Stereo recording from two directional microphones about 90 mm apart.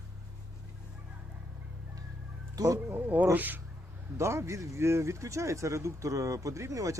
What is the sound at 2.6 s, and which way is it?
Speech, 40° right (ahead or behind).